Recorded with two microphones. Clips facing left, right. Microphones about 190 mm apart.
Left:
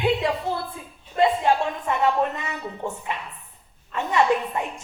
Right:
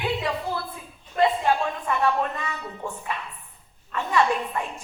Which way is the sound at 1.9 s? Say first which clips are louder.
Left 2 dB; 20° left (ahead or behind).